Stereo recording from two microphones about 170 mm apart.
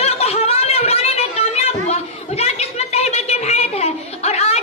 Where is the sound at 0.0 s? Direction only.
35° left (ahead or behind).